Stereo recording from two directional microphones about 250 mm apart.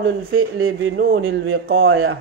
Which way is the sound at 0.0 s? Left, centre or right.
Right.